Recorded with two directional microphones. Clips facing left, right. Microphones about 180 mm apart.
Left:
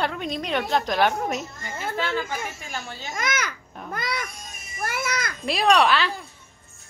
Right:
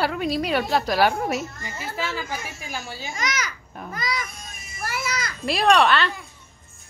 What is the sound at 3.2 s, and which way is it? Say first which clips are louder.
A child's voice: left 2 dB; 55° left (ahead or behind).